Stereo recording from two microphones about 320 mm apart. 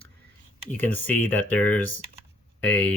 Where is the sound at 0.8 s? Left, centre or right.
Centre.